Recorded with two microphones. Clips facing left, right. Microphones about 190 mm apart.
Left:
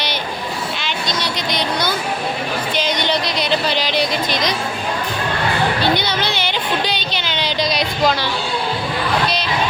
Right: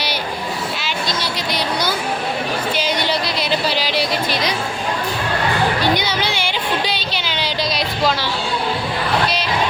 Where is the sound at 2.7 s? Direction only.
5° right (ahead or behind).